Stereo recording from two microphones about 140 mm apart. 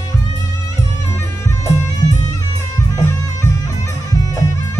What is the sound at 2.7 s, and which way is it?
Music, 25° left (ahead or behind).